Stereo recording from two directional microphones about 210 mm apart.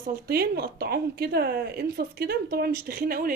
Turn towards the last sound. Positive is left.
turn(degrees=-45)  # may be behind; listen again after turning